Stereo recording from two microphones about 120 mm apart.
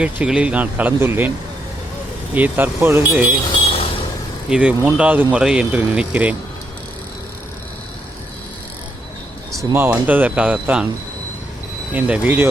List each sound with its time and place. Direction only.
0.0 s speech: 10° right (ahead or behind)
2.3 s speech: 15° right (ahead or behind)
3.5 s vehicle: 50° left (ahead or behind)
4.4 s speech: 10° right (ahead or behind)
9.7 s speech: 15° right (ahead or behind)
11.9 s speech: 10° right (ahead or behind)